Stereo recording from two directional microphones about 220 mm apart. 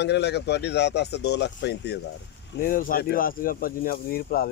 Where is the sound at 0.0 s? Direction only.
50° left (ahead or behind).